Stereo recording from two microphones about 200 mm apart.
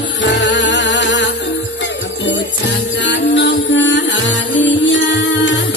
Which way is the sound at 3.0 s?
65° left (ahead or behind).